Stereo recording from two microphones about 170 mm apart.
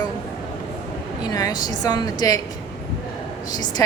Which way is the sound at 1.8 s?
25° left (ahead or behind).